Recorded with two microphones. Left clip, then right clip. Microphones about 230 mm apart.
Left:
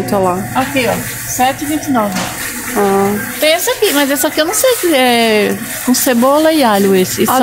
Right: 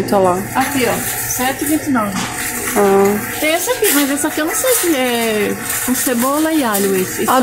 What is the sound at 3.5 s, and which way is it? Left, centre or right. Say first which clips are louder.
Speech: left 3 dB; left.